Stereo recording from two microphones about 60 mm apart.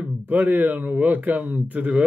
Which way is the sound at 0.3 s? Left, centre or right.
Right.